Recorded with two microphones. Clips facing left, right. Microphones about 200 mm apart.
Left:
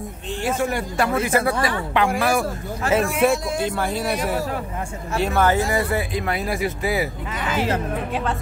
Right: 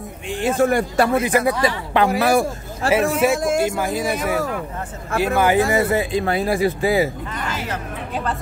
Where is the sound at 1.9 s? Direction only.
35° right (ahead or behind).